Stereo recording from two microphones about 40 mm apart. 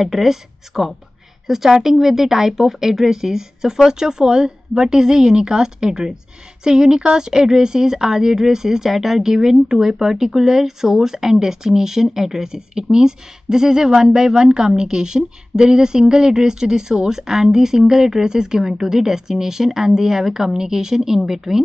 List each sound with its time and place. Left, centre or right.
0.0 s speech: centre